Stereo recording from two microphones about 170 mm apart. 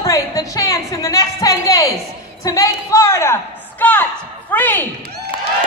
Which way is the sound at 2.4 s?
20° left (ahead or behind).